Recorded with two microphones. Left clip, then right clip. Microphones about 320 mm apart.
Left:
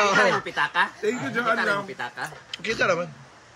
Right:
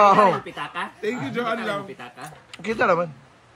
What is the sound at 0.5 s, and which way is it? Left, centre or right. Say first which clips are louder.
Speech: left 7 dB; left.